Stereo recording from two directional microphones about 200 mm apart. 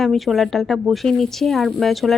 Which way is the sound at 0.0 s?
Centre (ahead or behind).